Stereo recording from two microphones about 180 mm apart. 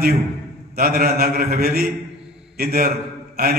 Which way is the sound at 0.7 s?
55° right (ahead or behind).